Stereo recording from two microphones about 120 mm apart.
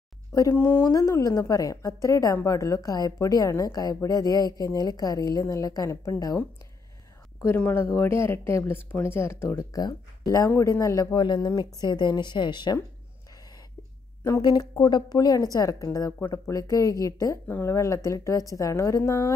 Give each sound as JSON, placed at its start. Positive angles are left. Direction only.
{"t": 0.3, "sound": "a woman's voice", "side_deg": 25}
{"t": 7.4, "sound": "a woman's voice", "side_deg": 15}
{"t": 11.1, "sound": "speech", "side_deg": 35}
{"t": 14.4, "sound": "a woman's voice", "side_deg": 30}